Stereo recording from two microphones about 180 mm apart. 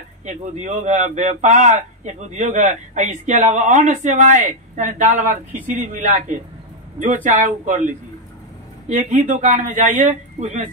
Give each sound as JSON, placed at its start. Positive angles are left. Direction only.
{"t": 0.2, "sound": "a man's voice", "side_deg": -45}